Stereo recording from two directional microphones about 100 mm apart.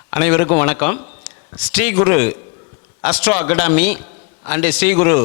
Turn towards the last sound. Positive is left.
turn(degrees=25)  # may be behind; listen again after turning